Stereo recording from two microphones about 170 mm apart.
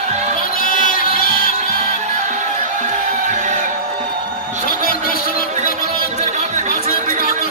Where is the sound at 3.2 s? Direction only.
45° right (ahead or behind).